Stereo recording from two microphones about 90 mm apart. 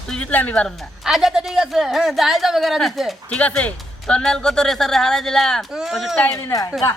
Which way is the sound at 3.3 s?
15° left (ahead or behind).